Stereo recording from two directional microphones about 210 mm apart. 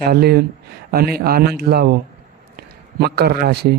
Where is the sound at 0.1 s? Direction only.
50° right (ahead or behind).